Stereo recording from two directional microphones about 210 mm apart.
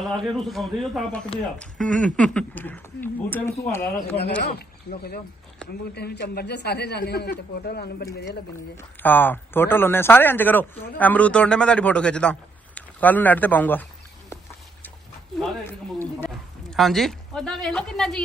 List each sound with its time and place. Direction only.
0.0 s a man's voice: centre (ahead or behind)
4.4 s a man's voice: 50° left (ahead or behind)
8.3 s a man's voice: 10° left (ahead or behind)
16.7 s speech: centre (ahead or behind)